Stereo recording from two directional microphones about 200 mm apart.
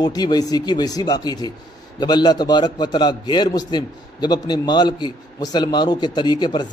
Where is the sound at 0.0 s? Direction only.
20° left (ahead or behind).